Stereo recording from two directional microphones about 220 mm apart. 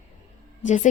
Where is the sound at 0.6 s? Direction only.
35° left (ahead or behind).